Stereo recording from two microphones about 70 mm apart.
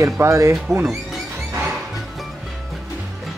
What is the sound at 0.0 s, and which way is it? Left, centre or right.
Speech, right.